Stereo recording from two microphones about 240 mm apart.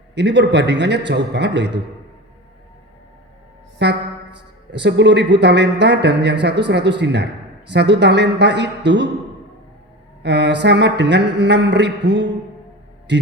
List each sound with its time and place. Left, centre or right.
0.1 s a man's voice: right
3.8 s a man's voice: right
10.2 s a man's voice: right